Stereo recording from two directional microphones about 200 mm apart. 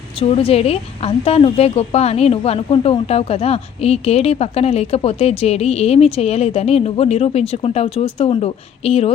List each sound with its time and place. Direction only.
0.2 s speech: 30° left (ahead or behind)